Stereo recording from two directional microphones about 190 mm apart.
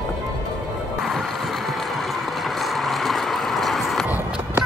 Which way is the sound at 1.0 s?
Centre (ahead or behind).